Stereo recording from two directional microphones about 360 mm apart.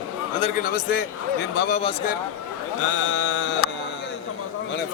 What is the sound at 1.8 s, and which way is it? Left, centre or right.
Speech, centre.